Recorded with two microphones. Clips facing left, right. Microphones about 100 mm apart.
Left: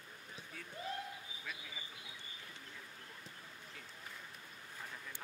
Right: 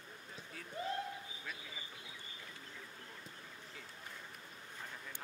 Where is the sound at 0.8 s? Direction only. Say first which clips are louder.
Right 4 dB; 30° right (ahead or behind).